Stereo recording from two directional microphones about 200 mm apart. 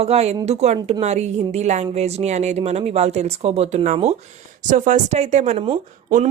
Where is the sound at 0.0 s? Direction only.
30° right (ahead or behind).